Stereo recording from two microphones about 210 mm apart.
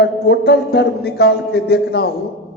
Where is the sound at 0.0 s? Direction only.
50° left (ahead or behind).